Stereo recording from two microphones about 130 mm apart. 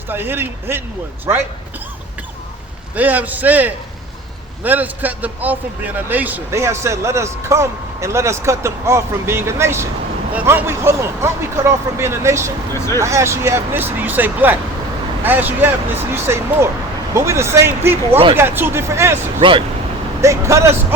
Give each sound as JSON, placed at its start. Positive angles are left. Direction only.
{"t": 0.1, "sound": "speech", "side_deg": -15}
{"t": 2.9, "sound": "a man's voice", "side_deg": -10}
{"t": 12.7, "sound": "speech", "side_deg": 20}
{"t": 13.0, "sound": "a man's voice", "side_deg": -20}
{"t": 19.4, "sound": "speech", "side_deg": -40}
{"t": 20.2, "sound": "a man's voice", "side_deg": -25}